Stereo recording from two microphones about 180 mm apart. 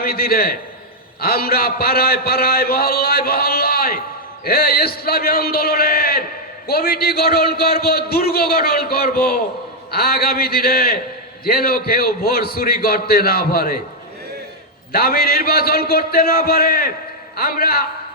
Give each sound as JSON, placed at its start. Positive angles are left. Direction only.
{"t": 0.0, "sound": "a man's voice", "side_deg": 55}
{"t": 14.9, "sound": "a man's voice", "side_deg": 55}